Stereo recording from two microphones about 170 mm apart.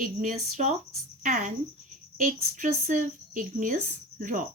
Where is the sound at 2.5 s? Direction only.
50° right (ahead or behind).